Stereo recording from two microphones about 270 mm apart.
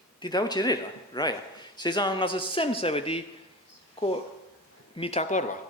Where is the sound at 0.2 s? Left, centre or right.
Centre.